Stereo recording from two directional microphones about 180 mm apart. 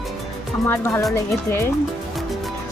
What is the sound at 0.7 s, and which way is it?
Speech, 15° left (ahead or behind).